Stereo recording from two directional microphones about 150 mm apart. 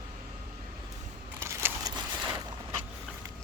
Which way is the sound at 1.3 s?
15° right (ahead or behind).